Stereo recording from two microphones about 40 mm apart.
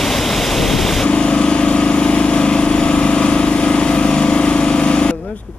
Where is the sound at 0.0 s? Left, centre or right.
Centre.